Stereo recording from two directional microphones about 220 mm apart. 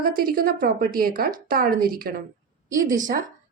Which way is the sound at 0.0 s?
40° right (ahead or behind).